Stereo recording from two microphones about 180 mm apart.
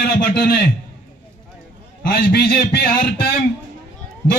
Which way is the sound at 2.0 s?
60° left (ahead or behind).